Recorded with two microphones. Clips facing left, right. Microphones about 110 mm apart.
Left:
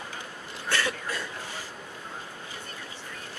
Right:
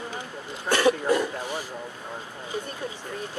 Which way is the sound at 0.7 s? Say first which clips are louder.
Right 10 dB; 20° right (ahead or behind).